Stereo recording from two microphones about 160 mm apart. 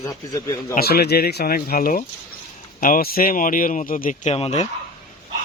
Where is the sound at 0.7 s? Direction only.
75° left (ahead or behind); by 4.7 s 40° left (ahead or behind).